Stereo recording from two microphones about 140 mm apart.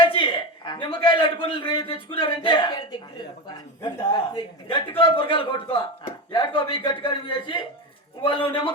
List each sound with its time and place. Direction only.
0.0 s a man's voice: 35° left (ahead or behind)
4.1 s a man's voice: 35° left (ahead or behind)